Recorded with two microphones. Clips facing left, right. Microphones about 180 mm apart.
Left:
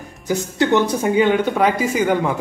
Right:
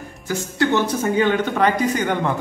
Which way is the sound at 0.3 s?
20° left (ahead or behind).